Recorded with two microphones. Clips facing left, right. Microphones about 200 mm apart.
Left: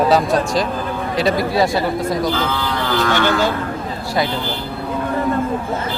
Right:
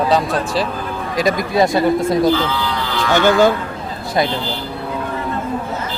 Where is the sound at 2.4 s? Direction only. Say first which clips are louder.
Even; 50° left (ahead or behind).